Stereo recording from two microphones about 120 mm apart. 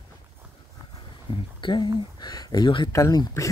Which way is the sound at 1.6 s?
40° left (ahead or behind).